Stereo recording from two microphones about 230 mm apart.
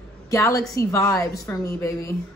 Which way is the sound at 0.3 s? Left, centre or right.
Centre.